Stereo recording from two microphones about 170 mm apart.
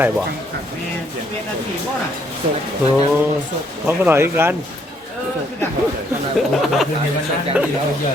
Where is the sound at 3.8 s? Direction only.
10° right (ahead or behind).